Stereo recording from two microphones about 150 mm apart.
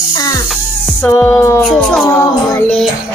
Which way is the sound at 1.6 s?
5° left (ahead or behind).